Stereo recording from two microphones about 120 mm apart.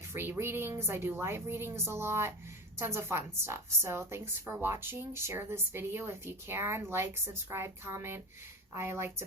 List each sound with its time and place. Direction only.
0.1 s speech: 20° right (ahead or behind)